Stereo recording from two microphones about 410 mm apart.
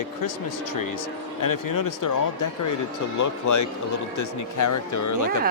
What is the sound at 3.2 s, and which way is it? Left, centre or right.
Speech, left.